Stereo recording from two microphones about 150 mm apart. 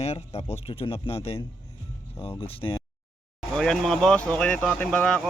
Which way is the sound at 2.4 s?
40° left (ahead or behind).